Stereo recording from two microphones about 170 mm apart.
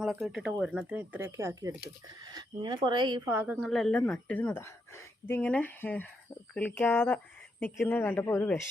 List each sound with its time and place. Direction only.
0.0 s speech: centre (ahead or behind); by 3.2 s 30° right (ahead or behind)
3.2 s speech: 10° right (ahead or behind)
3.7 s a woman's voice: centre (ahead or behind)